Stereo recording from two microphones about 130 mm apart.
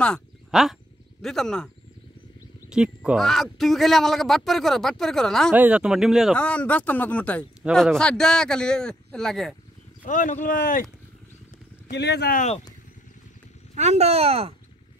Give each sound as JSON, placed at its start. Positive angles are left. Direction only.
{"t": 0.5, "sound": "a sound", "side_deg": -5}
{"t": 1.2, "sound": "speech", "side_deg": 5}
{"t": 2.7, "sound": "speech", "side_deg": -5}
{"t": 5.5, "sound": "speech", "side_deg": -10}
{"t": 6.3, "sound": "speech", "side_deg": 10}
{"t": 10.0, "sound": "speech", "side_deg": 80}
{"t": 12.3, "sound": "speech", "side_deg": 65}
{"t": 13.7, "sound": "speech", "side_deg": -55}